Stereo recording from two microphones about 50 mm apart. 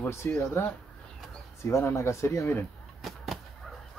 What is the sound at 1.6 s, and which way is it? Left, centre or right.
Speech, left.